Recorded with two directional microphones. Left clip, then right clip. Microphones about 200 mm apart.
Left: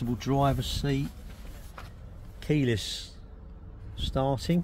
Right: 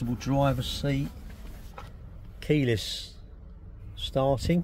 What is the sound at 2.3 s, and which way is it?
Speech, 5° right (ahead or behind).